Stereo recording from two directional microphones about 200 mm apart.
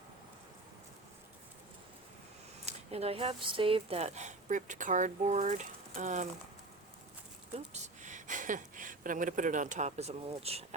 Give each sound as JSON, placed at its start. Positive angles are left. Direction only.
{"t": 2.6, "sound": "speech", "side_deg": -30}
{"t": 7.7, "sound": "speech", "side_deg": -40}